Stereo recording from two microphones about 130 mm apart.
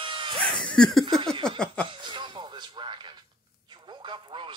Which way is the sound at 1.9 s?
35° right (ahead or behind).